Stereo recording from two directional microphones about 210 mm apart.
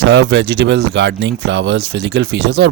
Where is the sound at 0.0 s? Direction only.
50° right (ahead or behind).